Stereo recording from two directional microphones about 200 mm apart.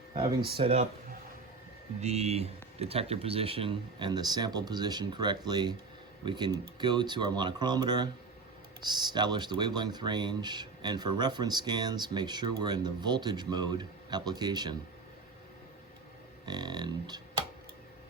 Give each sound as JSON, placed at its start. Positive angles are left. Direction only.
{"t": 0.1, "sound": "speech", "side_deg": -25}
{"t": 2.0, "sound": "speech", "side_deg": -30}
{"t": 16.5, "sound": "speech", "side_deg": -20}